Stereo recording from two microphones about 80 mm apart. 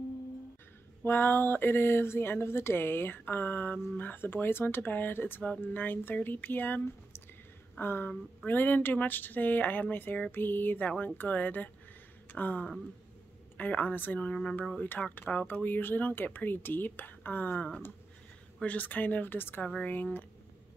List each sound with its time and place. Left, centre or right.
1.0 s speech: left
12.3 s a sound: left
13.6 s speech: centre